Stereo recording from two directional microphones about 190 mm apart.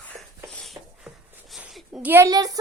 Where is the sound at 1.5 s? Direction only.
5° right (ahead or behind).